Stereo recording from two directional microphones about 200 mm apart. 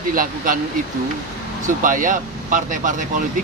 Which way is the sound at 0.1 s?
45° right (ahead or behind).